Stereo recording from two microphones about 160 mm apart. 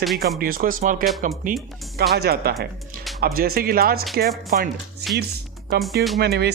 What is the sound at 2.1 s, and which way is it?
Speech, 80° right.